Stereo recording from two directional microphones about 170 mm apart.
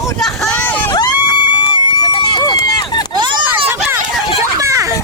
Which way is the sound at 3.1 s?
25° right (ahead or behind).